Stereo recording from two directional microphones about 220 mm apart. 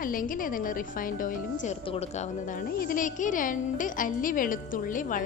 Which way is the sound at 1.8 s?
25° left (ahead or behind).